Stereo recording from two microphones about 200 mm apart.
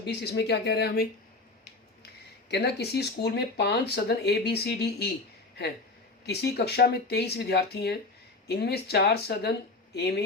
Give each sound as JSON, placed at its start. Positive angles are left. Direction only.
{"t": 0.0, "sound": "speech", "side_deg": 60}
{"t": 2.5, "sound": "speech", "side_deg": 55}
{"t": 6.2, "sound": "speech", "side_deg": 55}